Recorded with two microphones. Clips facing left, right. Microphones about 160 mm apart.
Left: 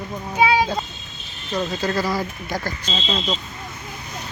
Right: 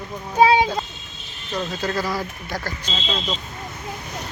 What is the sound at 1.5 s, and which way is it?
Speech, 10° left (ahead or behind).